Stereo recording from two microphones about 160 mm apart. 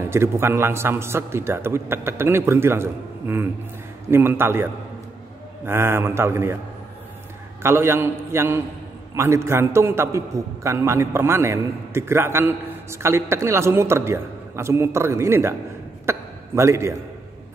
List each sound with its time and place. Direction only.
0.0 s a man's voice: 15° right (ahead or behind)
5.7 s a man's voice: 15° right (ahead or behind)
7.6 s a man's voice: 15° right (ahead or behind)